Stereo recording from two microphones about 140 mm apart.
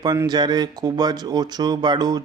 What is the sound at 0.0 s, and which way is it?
Speech, 30° right (ahead or behind).